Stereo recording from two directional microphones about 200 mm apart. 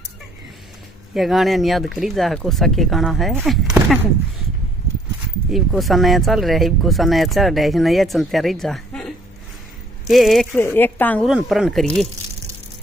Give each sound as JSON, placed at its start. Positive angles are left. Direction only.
{"t": 1.1, "sound": "speech", "side_deg": 0}
{"t": 5.5, "sound": "speech", "side_deg": 0}
{"t": 10.0, "sound": "speech", "side_deg": 0}
{"t": 11.2, "sound": "speech", "side_deg": 0}